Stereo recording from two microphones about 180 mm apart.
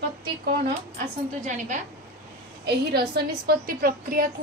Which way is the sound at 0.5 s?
40° right (ahead or behind).